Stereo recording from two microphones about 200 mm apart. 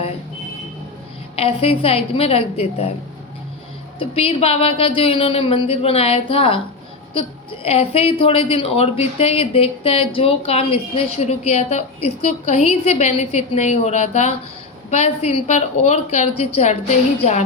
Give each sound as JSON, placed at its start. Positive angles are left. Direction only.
{"t": 1.4, "sound": "a woman's voice", "side_deg": 30}
{"t": 3.9, "sound": "a woman's voice", "side_deg": 30}